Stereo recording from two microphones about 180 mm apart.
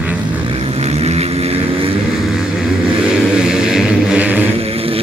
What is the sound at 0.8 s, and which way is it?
Vehicle, 35° right (ahead or behind).